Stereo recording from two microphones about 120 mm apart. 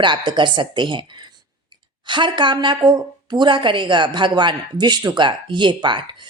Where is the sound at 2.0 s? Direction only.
40° right (ahead or behind).